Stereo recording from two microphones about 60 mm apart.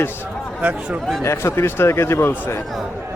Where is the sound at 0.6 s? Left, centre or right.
Right.